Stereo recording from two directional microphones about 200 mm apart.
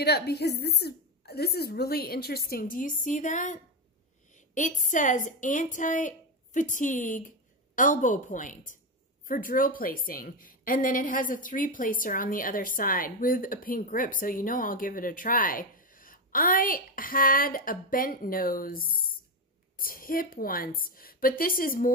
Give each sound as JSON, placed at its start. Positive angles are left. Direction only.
{"t": 0.0, "sound": "a woman's voice", "side_deg": 55}
{"t": 4.6, "sound": "a woman's voice", "side_deg": 40}